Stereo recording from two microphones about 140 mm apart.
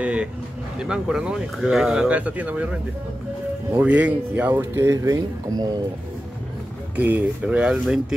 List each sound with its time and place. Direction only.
0.0 s a sound: 10° right (ahead or behind)
0.7 s speech: 5° right (ahead or behind)
3.7 s speech: 10° right (ahead or behind); by 5.7 s 25° right (ahead or behind)
7.0 s speech: 10° right (ahead or behind)